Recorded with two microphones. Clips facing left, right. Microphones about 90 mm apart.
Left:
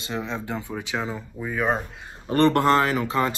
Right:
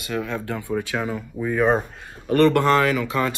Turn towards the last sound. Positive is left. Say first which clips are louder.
# right 1 dB
turn(degrees=30)  # may be behind; listen again after turning